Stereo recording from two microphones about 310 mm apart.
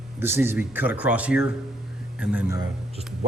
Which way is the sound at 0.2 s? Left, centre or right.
Centre.